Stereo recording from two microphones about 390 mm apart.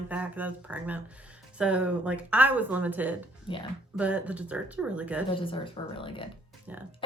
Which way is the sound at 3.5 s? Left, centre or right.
Centre.